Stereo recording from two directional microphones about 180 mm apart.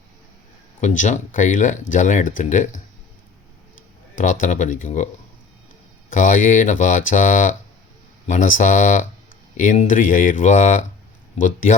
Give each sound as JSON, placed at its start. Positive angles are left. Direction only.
{"t": 0.8, "sound": "speech", "side_deg": 45}
{"t": 4.2, "sound": "speech", "side_deg": 45}
{"t": 6.1, "sound": "speech", "side_deg": 45}